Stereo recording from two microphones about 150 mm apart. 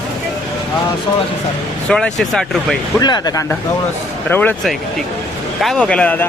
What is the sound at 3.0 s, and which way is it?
Speech, 25° left (ahead or behind).